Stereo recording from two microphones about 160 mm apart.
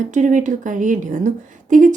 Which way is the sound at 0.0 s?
50° right (ahead or behind).